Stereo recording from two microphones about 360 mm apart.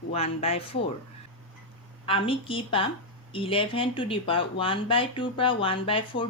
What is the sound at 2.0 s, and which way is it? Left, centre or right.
Speech, centre.